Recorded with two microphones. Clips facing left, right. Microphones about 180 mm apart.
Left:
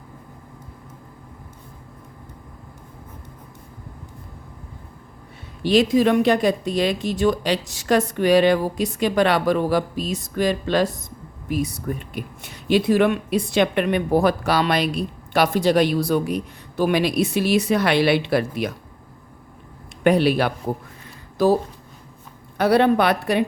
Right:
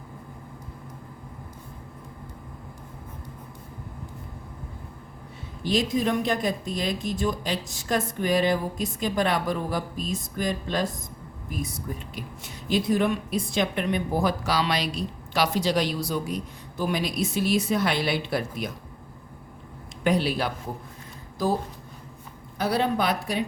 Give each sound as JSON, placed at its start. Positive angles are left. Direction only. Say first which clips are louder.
{"t": 5.6, "sound": "speech", "louder": "left 8 dB", "side_deg": 75}
{"t": 20.1, "sound": "speech", "louder": "left 7 dB", "side_deg": 65}